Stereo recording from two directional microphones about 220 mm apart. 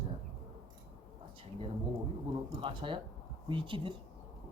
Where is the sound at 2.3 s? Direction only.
25° right (ahead or behind).